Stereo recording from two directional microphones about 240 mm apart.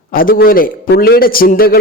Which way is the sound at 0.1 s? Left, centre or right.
Left.